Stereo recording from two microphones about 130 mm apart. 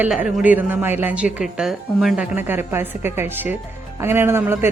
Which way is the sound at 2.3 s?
15° right (ahead or behind).